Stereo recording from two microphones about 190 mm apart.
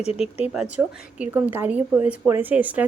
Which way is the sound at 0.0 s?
30° left (ahead or behind).